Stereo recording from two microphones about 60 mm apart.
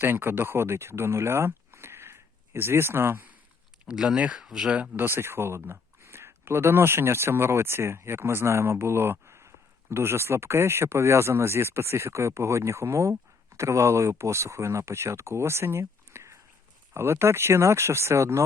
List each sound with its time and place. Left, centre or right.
0.0 s speech: right
3.8 s speech: centre
4.7 s speech: right
5.0 s speech: right
16.9 s speech: right